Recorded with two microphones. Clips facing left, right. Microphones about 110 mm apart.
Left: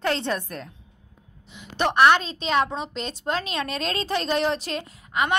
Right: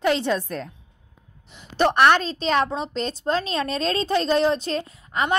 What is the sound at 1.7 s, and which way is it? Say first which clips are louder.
A woman's voice: right 1 dB; 35° right (ahead or behind).